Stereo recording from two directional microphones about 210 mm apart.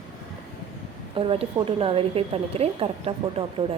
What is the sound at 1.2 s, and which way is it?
A woman's voice, 25° right (ahead or behind).